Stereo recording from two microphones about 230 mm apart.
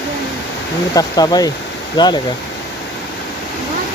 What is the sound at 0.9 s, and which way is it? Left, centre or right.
Speech, centre.